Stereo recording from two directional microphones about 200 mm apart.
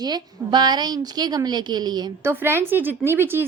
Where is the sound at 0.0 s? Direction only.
20° right (ahead or behind).